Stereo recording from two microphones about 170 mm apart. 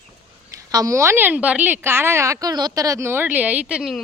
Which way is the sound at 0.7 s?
20° right (ahead or behind).